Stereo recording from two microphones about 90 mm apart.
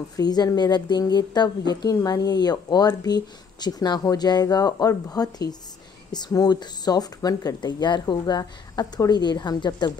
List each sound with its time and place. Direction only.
0.1 s speech: 50° left (ahead or behind)